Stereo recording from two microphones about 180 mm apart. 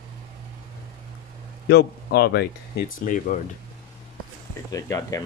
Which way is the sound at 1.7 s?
60° left (ahead or behind).